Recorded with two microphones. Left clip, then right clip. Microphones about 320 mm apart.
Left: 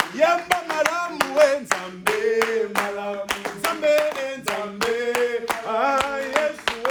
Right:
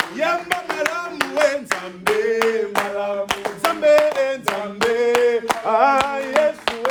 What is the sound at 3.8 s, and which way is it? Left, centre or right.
Hands, centre.